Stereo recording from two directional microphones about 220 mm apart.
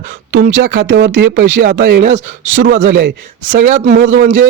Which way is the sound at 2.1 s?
60° right (ahead or behind).